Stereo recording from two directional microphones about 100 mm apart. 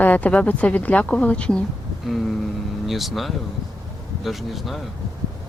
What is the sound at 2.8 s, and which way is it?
Speech, centre (ahead or behind).